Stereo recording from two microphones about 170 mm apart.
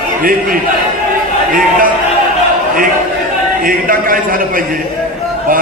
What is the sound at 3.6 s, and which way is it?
A man's voice, 55° right (ahead or behind).